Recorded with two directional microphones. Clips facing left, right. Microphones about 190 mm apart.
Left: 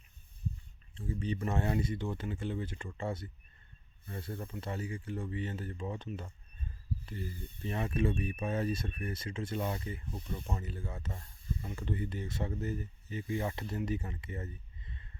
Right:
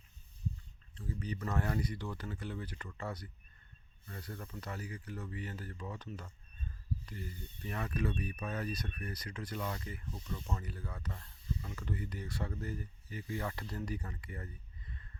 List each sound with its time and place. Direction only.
0.9 s speech: 25° left (ahead or behind)